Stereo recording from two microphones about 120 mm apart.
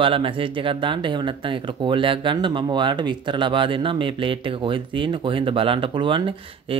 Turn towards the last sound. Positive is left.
turn(degrees=-45)  # may be behind; listen again after turning